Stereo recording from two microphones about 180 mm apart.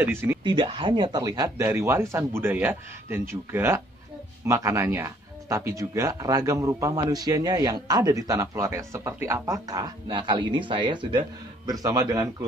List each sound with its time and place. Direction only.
0.0 s speech: 10° right (ahead or behind)
0.4 s speech: 25° right (ahead or behind)